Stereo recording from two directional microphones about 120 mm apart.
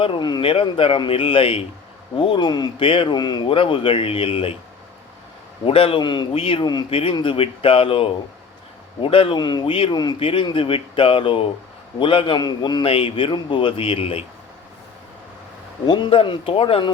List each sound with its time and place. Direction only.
0.0 s speech: 45° left (ahead or behind)
5.6 s speech: 50° left (ahead or behind)
6.4 s speech: 50° left (ahead or behind)
10.2 s speech: 50° left (ahead or behind)
12.8 s speech: 50° left (ahead or behind)
15.9 s speech: 45° left (ahead or behind)